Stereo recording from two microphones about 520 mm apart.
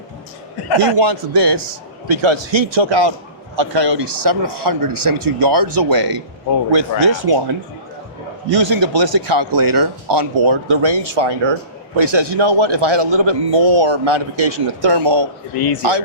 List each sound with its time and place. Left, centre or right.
1.0 s a man's voice: right
6.7 s a man's voice: right
8.4 s speech: right
10.4 s a man's voice: right
11.9 s a man's voice: right
15.5 s speech: left
15.8 s speech: right